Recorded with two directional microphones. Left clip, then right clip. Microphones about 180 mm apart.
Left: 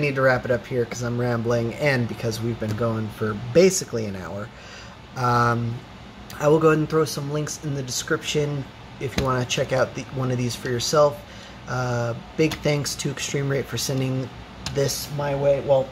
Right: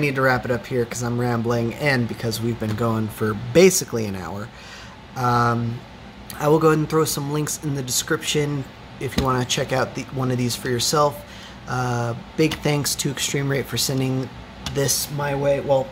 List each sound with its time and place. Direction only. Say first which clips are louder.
0.0 s speech: even; 20° right (ahead or behind)
2.8 s speech: right 2 dB; 25° right (ahead or behind)
5.1 s speech: right 1 dB; 10° right (ahead or behind)